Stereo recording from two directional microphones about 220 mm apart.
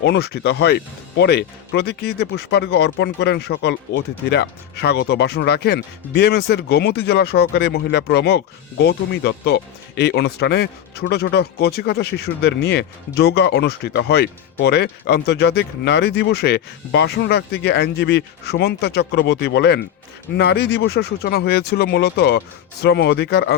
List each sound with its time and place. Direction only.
0.0 s speech: 50° left (ahead or behind)